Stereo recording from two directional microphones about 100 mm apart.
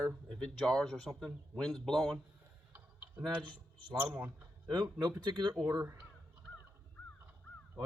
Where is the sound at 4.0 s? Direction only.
20° right (ahead or behind).